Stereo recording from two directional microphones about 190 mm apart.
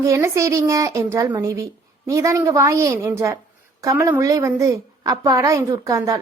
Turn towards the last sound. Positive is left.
turn(degrees=-15)  # may be behind; listen again after turning